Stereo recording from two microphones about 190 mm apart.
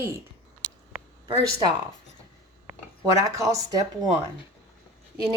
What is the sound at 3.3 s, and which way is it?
Speech, 15° right (ahead or behind).